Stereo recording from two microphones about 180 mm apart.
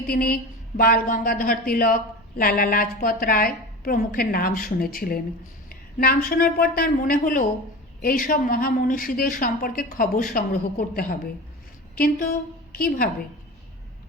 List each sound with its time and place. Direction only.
0.1 s a woman's voice: 55° left (ahead or behind)